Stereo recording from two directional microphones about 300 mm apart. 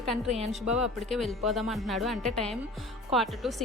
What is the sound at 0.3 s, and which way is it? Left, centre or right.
Speech, right.